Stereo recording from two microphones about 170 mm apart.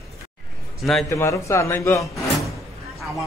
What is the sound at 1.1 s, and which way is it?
Speech, 20° left (ahead or behind).